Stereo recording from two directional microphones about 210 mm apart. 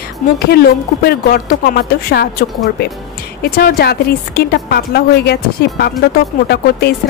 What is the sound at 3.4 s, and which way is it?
A woman's voice, 45° left (ahead or behind).